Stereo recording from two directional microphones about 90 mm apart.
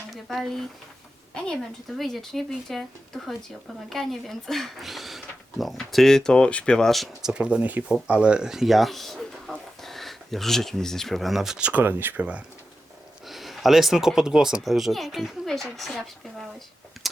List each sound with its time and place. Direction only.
0.1 s a woman's voice: centre (ahead or behind)
3.8 s speech: 5° left (ahead or behind)
9.5 s a sound: 5° left (ahead or behind)
9.8 s speech: centre (ahead or behind)
11.7 s speech: 25° right (ahead or behind)
13.2 s speech: centre (ahead or behind)